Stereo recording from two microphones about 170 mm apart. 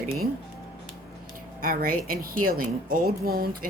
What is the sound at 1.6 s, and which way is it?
A woman's voice, 55° right (ahead or behind).